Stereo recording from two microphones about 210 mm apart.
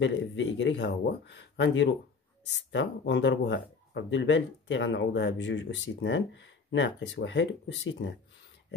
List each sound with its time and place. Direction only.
0.0 s speech: 60° left (ahead or behind)